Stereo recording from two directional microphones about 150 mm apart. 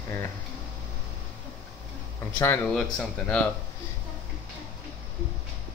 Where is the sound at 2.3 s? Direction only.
15° left (ahead or behind).